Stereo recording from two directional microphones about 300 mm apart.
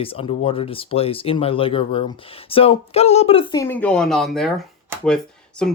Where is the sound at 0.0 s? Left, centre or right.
Centre.